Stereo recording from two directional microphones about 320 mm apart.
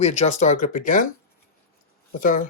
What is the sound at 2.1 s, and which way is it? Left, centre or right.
Speech, left.